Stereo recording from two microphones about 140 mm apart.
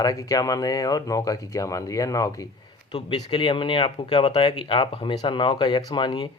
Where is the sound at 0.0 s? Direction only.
25° left (ahead or behind).